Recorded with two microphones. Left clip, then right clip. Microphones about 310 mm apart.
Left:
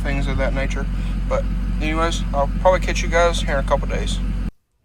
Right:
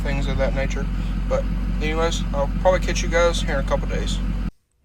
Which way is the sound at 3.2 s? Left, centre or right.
Centre.